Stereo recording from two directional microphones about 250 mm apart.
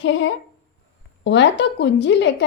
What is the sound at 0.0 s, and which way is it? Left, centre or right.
A woman's voice, left.